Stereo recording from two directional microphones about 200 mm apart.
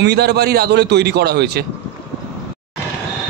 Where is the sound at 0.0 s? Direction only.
55° right (ahead or behind).